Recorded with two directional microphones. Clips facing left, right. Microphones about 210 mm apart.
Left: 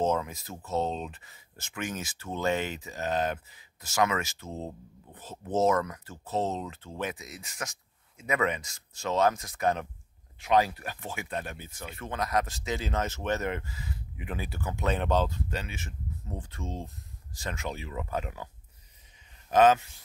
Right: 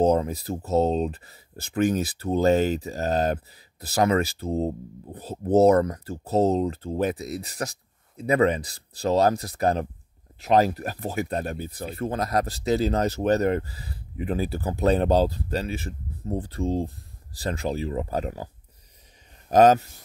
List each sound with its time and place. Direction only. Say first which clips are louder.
0.0 s speech: right 7 dB; 35° right (ahead or behind)
19.5 s speech: right 5 dB; 40° right (ahead or behind)